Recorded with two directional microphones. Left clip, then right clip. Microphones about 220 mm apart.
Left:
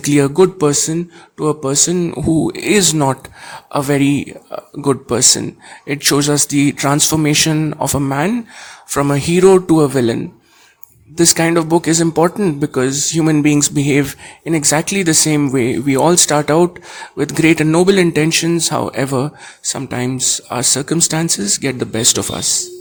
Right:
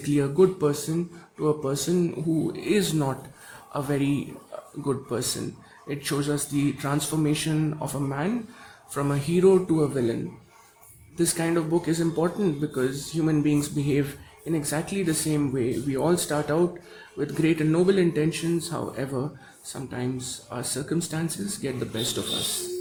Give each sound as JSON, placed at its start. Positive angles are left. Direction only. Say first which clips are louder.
{"t": 0.0, "sound": "speech", "louder": "left 10 dB", "side_deg": 35}
{"t": 11.2, "sound": "speech", "louder": "left 12 dB", "side_deg": 40}